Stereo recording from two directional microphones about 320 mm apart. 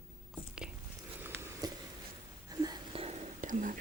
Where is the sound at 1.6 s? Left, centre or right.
Centre.